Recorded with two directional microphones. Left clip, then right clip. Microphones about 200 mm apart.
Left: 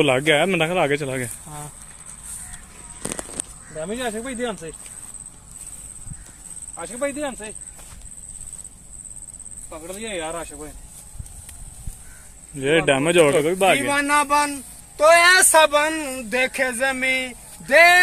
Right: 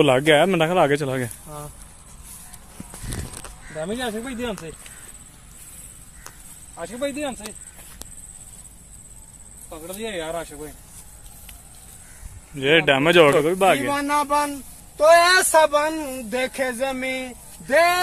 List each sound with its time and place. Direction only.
0.0 s speech: 15° right (ahead or behind)
3.8 s speech: 15° right (ahead or behind)
6.8 s speech: 15° right (ahead or behind)
12.5 s a man's voice: centre (ahead or behind)